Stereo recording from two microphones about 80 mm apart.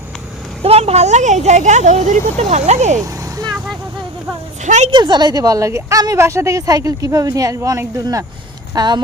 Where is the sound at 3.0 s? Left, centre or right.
Right.